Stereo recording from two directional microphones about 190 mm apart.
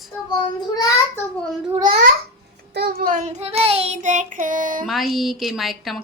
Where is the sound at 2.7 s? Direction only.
50° right (ahead or behind).